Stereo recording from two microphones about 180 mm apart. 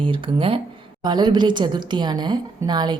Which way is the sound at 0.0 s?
30° right (ahead or behind).